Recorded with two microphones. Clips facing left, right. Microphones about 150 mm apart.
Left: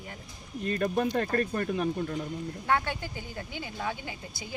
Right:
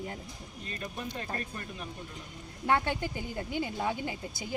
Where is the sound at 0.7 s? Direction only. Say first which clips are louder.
Left 12 dB; 60° left (ahead or behind).